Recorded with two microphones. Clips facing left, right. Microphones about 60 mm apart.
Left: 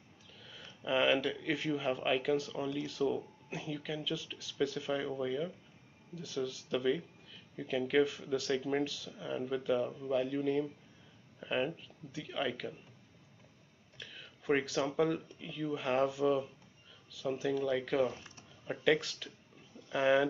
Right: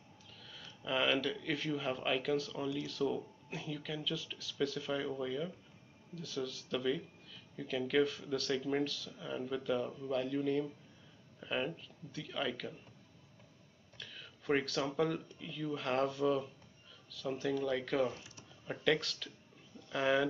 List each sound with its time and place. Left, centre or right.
0.4 s speech: centre
13.9 s speech: centre